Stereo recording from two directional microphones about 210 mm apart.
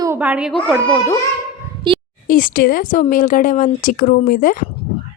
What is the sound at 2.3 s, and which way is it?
Speech, 40° left (ahead or behind).